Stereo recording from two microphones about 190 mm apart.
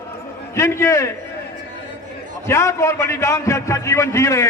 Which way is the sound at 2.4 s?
15° left (ahead or behind).